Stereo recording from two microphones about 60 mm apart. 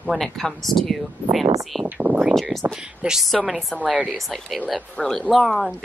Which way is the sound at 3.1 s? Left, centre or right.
Centre.